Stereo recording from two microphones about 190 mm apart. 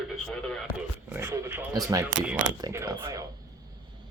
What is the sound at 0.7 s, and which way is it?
Speech, 10° right (ahead or behind).